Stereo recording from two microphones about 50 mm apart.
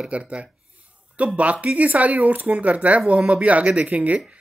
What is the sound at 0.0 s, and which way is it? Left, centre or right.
Speech, right.